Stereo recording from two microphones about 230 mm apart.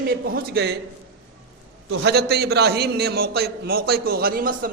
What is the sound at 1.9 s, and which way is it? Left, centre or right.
A man's voice, right.